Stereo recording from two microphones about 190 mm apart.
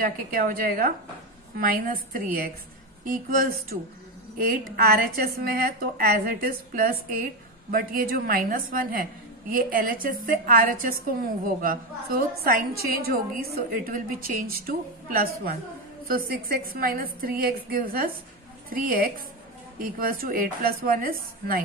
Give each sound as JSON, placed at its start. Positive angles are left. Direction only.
{"t": 0.0, "sound": "a woman's voice", "side_deg": -50}